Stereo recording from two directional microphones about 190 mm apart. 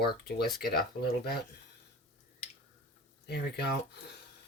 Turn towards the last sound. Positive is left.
turn(degrees=60)  # may be behind; listen again after turning